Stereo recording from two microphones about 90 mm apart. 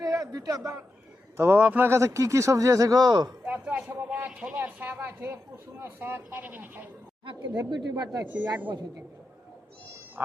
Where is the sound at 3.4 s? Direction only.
15° right (ahead or behind).